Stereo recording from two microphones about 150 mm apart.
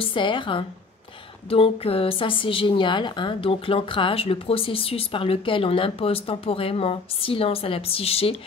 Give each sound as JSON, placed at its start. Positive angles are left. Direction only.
{"t": 0.0, "sound": "a woman's voice", "side_deg": 35}